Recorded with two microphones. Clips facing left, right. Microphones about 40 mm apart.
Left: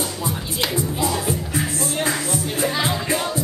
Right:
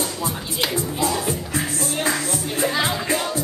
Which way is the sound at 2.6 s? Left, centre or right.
Centre.